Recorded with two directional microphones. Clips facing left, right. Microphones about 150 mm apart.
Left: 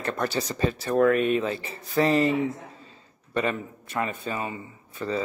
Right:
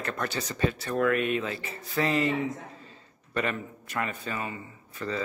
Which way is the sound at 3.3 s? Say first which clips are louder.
Left 3 dB; 25° left (ahead or behind).